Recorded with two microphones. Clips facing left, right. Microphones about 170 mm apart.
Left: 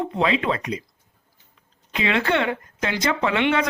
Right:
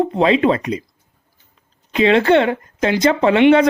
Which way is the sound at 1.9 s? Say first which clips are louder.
Right 9 dB; 30° right (ahead or behind).